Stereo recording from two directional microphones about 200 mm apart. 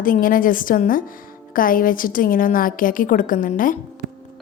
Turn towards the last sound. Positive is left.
turn(degrees=40)  # may be behind; listen again after turning